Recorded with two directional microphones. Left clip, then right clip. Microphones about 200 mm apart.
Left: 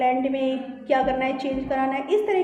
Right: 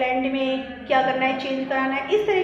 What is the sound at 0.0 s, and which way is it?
A woman's voice, 55° left (ahead or behind).